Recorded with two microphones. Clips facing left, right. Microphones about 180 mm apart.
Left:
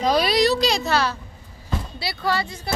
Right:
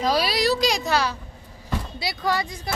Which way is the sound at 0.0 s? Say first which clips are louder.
Left 3 dB; 5° right (ahead or behind).